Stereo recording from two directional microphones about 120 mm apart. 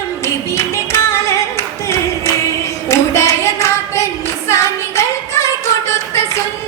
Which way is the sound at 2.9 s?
25° left (ahead or behind).